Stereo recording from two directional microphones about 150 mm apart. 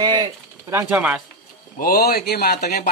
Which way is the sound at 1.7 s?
85° left.